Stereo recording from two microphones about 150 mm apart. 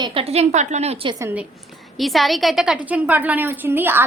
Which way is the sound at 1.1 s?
15° right (ahead or behind).